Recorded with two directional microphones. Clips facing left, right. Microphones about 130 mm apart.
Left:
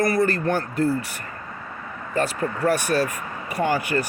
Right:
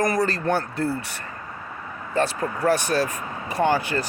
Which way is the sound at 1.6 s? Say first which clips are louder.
Even; 5° right (ahead or behind).